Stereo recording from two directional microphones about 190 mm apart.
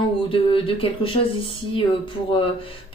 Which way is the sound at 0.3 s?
30° left (ahead or behind).